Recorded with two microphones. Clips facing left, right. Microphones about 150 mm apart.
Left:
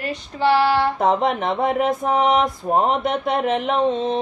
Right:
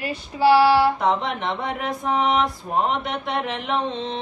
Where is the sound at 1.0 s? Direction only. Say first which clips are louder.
Left 4 dB; 50° left (ahead or behind).